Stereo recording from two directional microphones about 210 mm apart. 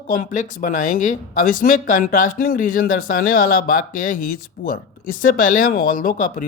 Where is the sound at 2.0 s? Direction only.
40° left (ahead or behind).